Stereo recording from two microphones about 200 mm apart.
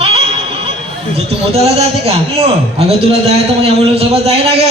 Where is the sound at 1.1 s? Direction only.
30° right (ahead or behind).